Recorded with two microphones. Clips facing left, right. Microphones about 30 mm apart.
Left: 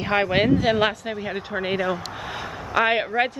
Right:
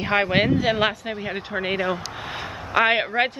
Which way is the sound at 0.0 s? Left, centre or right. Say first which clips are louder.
Even; centre.